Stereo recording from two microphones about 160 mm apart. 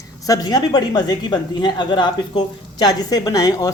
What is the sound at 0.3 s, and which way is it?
Speech, 25° left (ahead or behind).